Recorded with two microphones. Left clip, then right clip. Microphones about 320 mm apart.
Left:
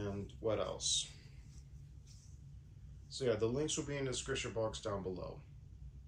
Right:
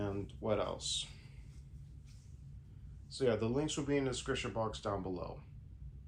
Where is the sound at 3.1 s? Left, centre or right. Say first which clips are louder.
Right 2 dB; right.